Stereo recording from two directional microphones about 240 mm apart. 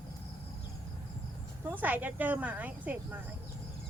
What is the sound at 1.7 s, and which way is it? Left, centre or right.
Speech, centre.